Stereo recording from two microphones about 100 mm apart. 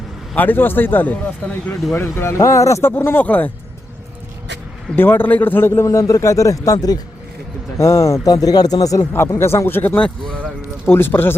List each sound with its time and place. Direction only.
0.3 s a man's voice: 20° left (ahead or behind)
1.9 s a man's voice: 25° left (ahead or behind)
4.9 s a man's voice: 20° left (ahead or behind); by 9.0 s 35° left (ahead or behind)
9.4 s a man's voice: 25° left (ahead or behind)
10.2 s a sound: 10° left (ahead or behind)
10.8 s a man's voice: 20° left (ahead or behind)